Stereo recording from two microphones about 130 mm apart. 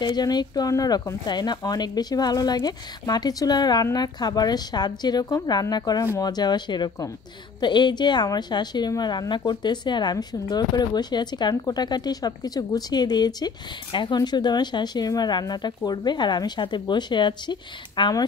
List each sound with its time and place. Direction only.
0.0 s speech: 35° left (ahead or behind)